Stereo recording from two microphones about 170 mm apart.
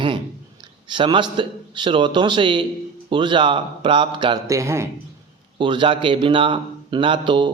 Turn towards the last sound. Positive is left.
turn(degrees=-30)  # may be behind; listen again after turning